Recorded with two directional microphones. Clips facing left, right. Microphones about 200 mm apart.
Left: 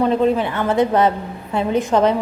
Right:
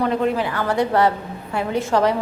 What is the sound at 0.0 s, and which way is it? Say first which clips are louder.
A woman's voice: left 4 dB; 20° left (ahead or behind).